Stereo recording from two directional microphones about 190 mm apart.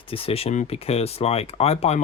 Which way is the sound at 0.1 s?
30° left (ahead or behind).